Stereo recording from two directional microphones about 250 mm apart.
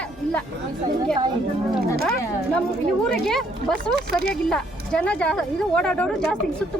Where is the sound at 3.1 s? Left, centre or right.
Centre.